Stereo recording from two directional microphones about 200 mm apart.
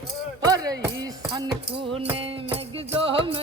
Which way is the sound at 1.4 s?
20° right (ahead or behind).